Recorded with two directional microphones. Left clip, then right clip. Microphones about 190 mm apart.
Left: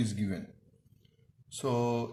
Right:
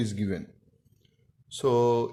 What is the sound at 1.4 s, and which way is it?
Speech, 35° right (ahead or behind).